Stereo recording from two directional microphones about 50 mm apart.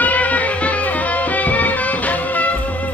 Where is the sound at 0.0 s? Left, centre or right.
Left.